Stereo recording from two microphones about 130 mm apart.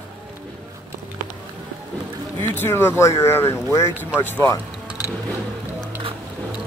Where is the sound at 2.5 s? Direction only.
20° left (ahead or behind).